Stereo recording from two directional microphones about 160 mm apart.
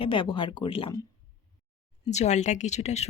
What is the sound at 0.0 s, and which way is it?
Speech, 30° left (ahead or behind).